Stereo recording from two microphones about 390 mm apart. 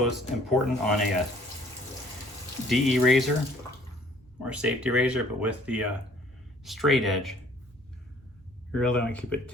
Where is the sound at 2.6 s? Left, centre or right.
Centre.